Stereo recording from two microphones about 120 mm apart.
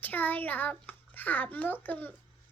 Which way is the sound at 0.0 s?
15° left (ahead or behind).